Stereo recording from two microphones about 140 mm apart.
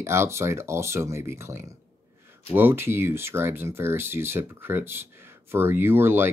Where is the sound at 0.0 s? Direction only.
20° right (ahead or behind).